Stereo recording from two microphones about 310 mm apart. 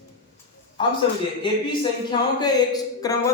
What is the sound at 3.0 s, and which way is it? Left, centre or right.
Speech, centre.